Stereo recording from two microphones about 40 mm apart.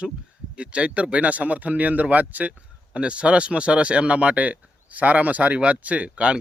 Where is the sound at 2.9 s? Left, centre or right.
Right.